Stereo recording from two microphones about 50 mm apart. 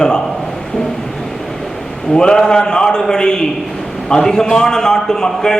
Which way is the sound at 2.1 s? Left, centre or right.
Centre.